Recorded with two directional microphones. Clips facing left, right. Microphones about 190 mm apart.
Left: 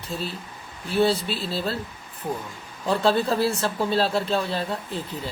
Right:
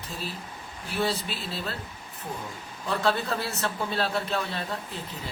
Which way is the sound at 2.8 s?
30° left (ahead or behind).